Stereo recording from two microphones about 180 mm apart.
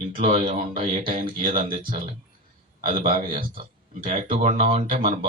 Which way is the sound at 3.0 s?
50° right (ahead or behind).